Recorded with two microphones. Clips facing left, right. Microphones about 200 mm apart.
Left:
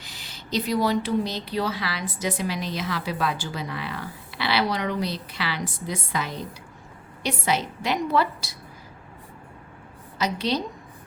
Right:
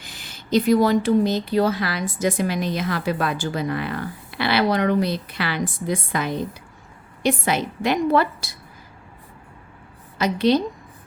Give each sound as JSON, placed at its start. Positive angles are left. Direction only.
{"t": 0.0, "sound": "speech", "side_deg": -50}
{"t": 10.2, "sound": "speech", "side_deg": -55}